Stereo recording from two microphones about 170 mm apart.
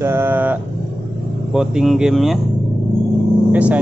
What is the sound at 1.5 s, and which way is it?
Speech, 5° right (ahead or behind).